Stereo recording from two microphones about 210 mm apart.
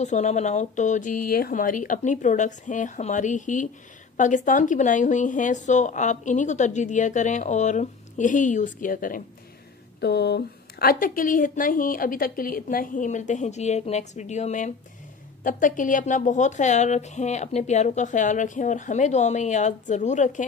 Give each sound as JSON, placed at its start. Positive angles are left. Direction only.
{"t": 0.0, "sound": "speech", "side_deg": 35}
{"t": 9.9, "sound": "speech", "side_deg": 50}